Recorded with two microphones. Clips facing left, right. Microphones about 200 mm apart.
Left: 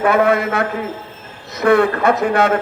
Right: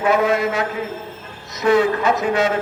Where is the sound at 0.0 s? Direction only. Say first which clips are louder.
Left 2 dB; 60° left (ahead or behind).